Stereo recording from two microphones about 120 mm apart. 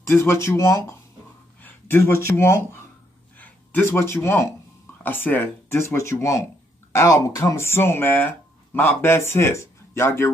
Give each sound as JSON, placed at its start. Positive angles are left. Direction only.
{"t": 0.0, "sound": "speech", "side_deg": 20}